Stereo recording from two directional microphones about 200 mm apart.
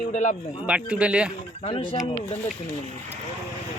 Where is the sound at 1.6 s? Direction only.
30° left (ahead or behind).